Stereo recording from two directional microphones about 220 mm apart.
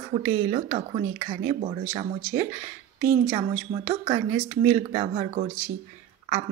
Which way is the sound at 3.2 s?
10° right (ahead or behind).